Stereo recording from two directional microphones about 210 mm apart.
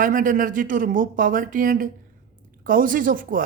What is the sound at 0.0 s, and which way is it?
Speech, 40° right (ahead or behind).